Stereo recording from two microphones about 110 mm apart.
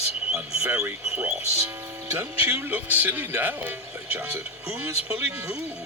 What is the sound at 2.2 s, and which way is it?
Speech, 20° right (ahead or behind).